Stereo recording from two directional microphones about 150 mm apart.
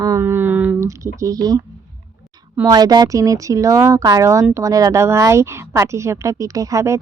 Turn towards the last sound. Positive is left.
turn(degrees=-20)  # may be behind; listen again after turning